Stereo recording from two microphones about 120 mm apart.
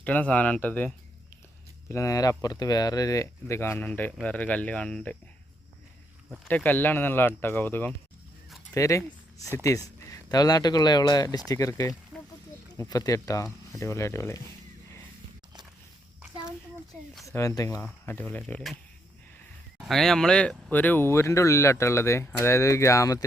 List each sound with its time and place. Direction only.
0.0 s speech: 10° left (ahead or behind)
1.9 s speech: 25° left (ahead or behind); by 5.1 s 10° left (ahead or behind)
6.5 s speech: 15° left (ahead or behind)
17.2 s speech: 25° left (ahead or behind)
18.0 s speech: 15° left (ahead or behind)
19.8 s speech: 5° left (ahead or behind); by 23.2 s 25° left (ahead or behind)